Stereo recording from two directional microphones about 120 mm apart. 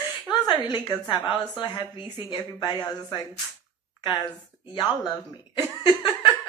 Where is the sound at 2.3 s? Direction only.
40° left (ahead or behind).